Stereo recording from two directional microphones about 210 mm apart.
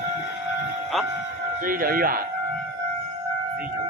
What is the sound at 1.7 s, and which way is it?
Speech, 45° right (ahead or behind).